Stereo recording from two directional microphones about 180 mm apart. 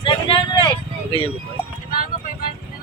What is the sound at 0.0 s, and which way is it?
Vehicle, 30° left (ahead or behind).